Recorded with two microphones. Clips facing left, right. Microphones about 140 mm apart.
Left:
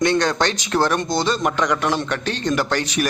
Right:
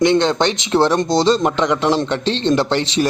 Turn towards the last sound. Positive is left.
turn(degrees=-25)  # may be behind; listen again after turning